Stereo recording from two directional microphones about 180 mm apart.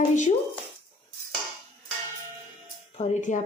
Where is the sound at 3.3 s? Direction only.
40° left (ahead or behind).